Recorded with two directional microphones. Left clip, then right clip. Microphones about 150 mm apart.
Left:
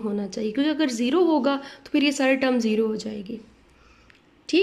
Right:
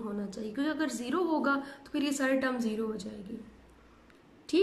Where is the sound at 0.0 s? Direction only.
20° left (ahead or behind).